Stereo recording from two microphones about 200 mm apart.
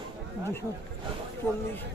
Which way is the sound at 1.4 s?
10° left (ahead or behind).